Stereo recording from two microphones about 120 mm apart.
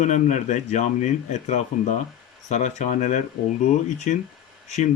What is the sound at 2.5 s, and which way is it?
Speech, 90° left.